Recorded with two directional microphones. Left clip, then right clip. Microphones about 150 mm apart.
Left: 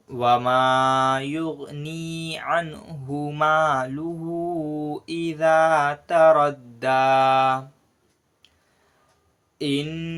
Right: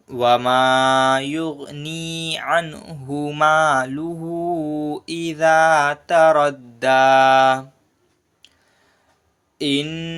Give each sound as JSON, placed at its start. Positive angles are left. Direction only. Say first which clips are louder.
{"t": 0.1, "sound": "mantra", "louder": "right 3 dB", "side_deg": -30}
{"t": 9.6, "sound": "mantra", "louder": "right 4 dB", "side_deg": -25}